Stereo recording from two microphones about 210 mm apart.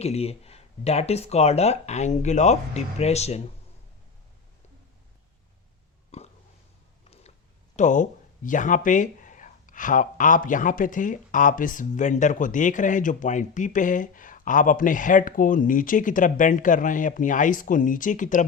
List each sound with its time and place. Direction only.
0.0 s speech: 30° left (ahead or behind)
6.1 s a sound: 30° left (ahead or behind)
7.8 s speech: 35° left (ahead or behind)